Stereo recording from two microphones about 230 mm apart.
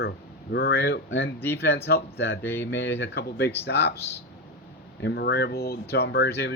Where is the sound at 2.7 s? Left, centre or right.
Left.